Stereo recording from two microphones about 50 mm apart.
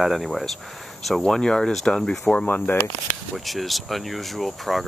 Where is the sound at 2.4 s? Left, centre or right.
Left.